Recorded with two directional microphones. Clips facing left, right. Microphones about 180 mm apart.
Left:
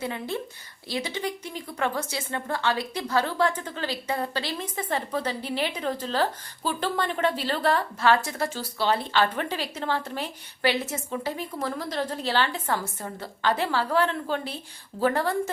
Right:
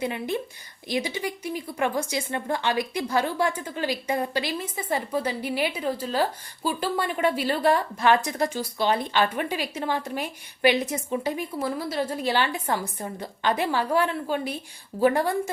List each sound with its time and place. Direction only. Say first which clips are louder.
0.0 s a woman's voice: right 3 dB; 15° right (ahead or behind)